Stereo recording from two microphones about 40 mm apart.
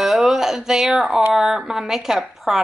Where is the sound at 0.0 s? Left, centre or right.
Centre.